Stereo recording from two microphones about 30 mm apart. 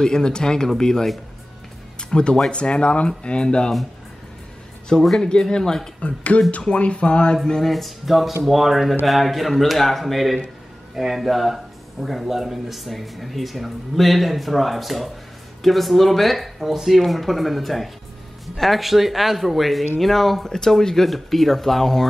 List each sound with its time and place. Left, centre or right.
0.0 s speech: left
2.0 s music: left
2.5 s speech: left
4.9 s speech: centre
5.9 s speech: left
7.6 s speech: centre
16.5 s speech: centre
17.0 s speech: centre
20.4 s speech: centre